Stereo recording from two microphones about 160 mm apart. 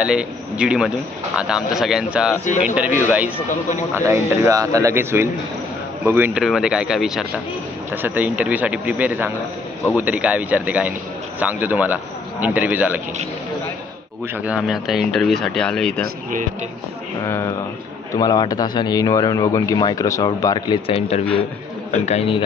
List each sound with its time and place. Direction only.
0.0 s a man's voice: 5° right (ahead or behind)
3.9 s a man's voice: 20° right (ahead or behind)
14.3 s a man's voice: 10° right (ahead or behind)
17.2 s a man's voice: 20° left (ahead or behind); by 22.4 s 40° left (ahead or behind)